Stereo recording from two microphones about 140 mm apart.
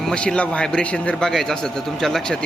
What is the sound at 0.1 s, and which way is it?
A man's voice, 5° left (ahead or behind).